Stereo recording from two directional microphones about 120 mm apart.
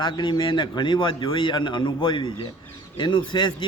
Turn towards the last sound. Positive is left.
turn(degrees=40)  # may be behind; listen again after turning